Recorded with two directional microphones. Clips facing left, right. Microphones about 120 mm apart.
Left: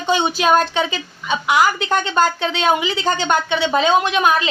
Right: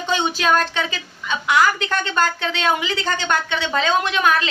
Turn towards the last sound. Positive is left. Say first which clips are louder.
# left 3 dB
turn(degrees=20)  # may be behind; listen again after turning